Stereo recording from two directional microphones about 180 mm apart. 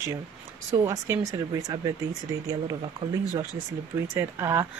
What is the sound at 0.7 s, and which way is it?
A woman's voice, 15° right (ahead or behind).